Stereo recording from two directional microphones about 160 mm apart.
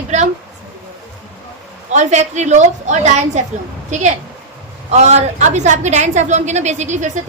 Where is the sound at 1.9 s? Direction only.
45° right (ahead or behind).